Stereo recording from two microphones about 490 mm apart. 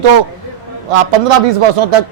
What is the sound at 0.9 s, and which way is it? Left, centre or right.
A man's voice, right.